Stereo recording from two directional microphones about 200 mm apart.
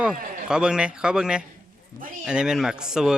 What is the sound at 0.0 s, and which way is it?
Speech, 5° right (ahead or behind).